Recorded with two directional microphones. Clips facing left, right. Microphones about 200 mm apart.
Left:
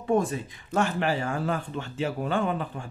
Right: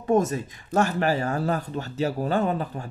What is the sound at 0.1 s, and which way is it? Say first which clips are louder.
Speech: right 3 dB; 45° right (ahead or behind).